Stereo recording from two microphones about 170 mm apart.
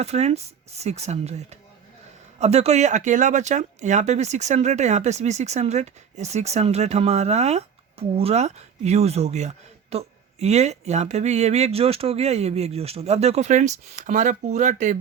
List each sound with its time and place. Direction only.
0.0 s speech: 40° right (ahead or behind)